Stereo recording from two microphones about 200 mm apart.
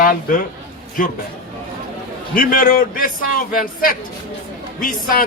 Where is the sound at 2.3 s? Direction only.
45° left (ahead or behind).